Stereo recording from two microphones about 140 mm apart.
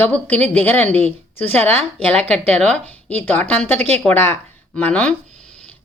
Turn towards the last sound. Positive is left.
turn(degrees=10)  # may be behind; listen again after turning